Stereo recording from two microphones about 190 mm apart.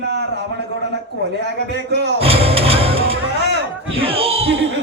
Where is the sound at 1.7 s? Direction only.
60° right (ahead or behind).